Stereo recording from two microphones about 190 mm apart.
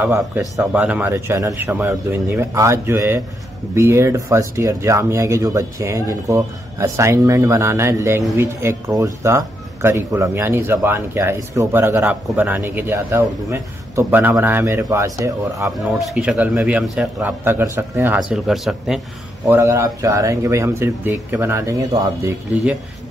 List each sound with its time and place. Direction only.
0.0 s speech: 10° right (ahead or behind)
15.8 s speech: centre (ahead or behind)
19.4 s speech: 15° right (ahead or behind)
22.5 s speech: 5° right (ahead or behind)